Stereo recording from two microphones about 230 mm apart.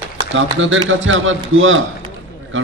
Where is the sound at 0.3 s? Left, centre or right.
Right.